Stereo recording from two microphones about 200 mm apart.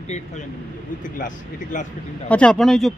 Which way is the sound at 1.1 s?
40° left (ahead or behind).